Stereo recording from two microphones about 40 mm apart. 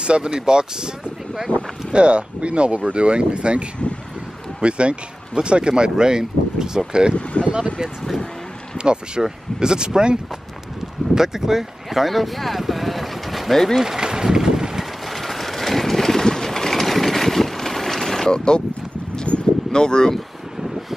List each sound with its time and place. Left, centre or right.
0.0 s speech: right
8.7 s speech: right
11.1 s speech: centre
13.7 s a sound: centre
15.0 s vehicle: centre; by 18.6 s left
19.3 s a sound: left
19.7 s speech: centre